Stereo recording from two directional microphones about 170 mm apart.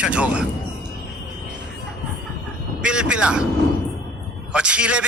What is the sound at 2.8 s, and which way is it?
Speech, 5° right (ahead or behind).